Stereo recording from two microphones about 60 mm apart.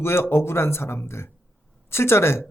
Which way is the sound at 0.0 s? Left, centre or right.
Left.